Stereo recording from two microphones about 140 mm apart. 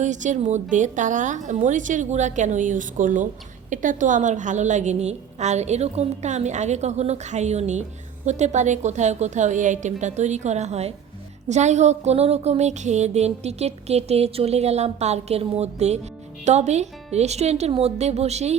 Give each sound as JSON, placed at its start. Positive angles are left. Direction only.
{"t": 0.0, "sound": "a woman's voice", "side_deg": -60}